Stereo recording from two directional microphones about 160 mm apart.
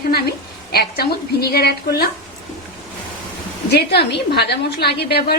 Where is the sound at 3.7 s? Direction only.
90° left.